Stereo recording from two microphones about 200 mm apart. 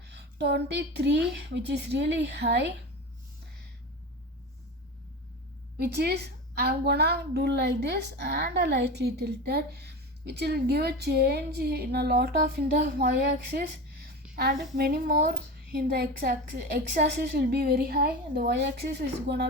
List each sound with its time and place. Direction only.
0.0 s speech: 60° right (ahead or behind)
5.7 s a woman's voice: 55° right (ahead or behind)